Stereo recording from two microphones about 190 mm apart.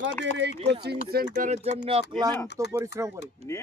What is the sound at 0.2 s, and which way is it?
Speech, 65° right (ahead or behind).